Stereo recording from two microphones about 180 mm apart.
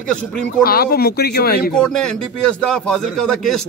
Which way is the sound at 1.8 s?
5° left (ahead or behind).